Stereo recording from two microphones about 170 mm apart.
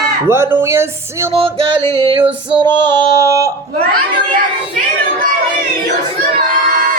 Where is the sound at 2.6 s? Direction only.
20° right (ahead or behind).